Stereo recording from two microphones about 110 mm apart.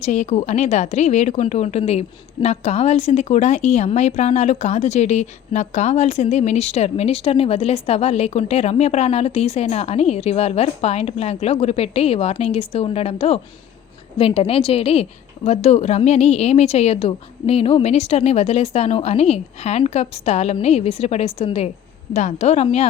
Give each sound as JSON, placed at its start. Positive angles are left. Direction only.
{"t": 0.0, "sound": "a woman's voice", "side_deg": 90}
{"t": 15.4, "sound": "a woman's voice", "side_deg": 80}
{"t": 22.1, "sound": "speech", "side_deg": 90}